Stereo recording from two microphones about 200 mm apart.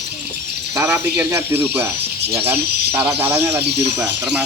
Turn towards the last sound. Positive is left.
turn(degrees=-10)  # may be behind; listen again after turning